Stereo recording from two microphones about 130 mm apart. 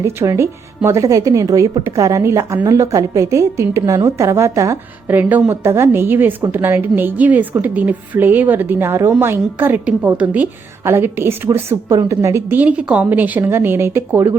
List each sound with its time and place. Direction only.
0.0 s a woman's voice: 20° right (ahead or behind)